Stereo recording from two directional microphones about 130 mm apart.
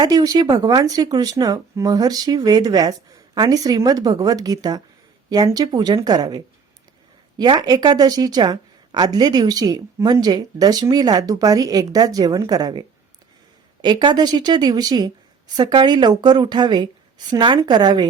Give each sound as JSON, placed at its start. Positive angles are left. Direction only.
{"t": 0.0, "sound": "a woman's voice", "side_deg": -35}
{"t": 13.8, "sound": "a woman's voice", "side_deg": -35}